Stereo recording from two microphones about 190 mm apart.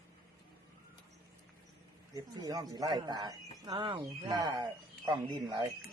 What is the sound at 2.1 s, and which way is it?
Speech, 20° right (ahead or behind).